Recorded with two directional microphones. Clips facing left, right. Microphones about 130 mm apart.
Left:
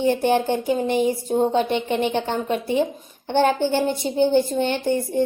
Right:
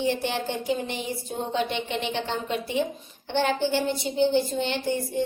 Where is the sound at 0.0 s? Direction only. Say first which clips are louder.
Left 7 dB; 45° left (ahead or behind).